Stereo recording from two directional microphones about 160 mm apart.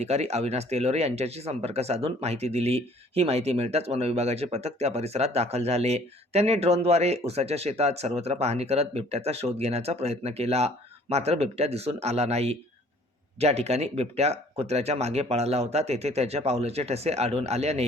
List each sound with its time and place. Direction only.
0.0 s speech: 40° right (ahead or behind)